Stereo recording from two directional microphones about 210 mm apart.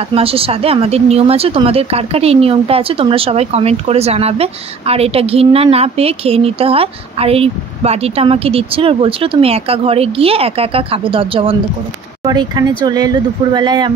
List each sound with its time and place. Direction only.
0.1 s speech: 25° right (ahead or behind)